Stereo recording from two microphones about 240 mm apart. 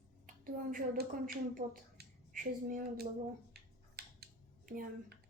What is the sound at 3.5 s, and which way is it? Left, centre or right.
Scissors, right.